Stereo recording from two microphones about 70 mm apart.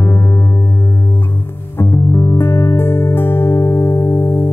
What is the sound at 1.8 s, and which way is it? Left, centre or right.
Music, left.